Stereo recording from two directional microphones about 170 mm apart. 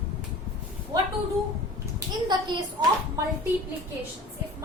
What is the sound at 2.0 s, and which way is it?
Speech, 25° right (ahead or behind).